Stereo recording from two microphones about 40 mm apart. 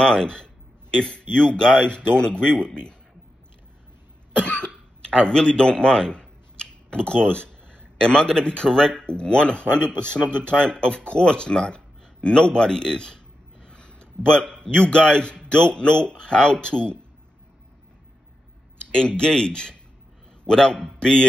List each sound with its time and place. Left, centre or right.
0.0 s speech: centre
4.5 s speech: left
18.9 s speech: left